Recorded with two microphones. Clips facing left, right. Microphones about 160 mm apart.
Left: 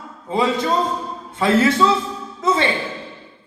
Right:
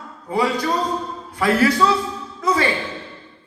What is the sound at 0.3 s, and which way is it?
A man's voice, 25° left (ahead or behind).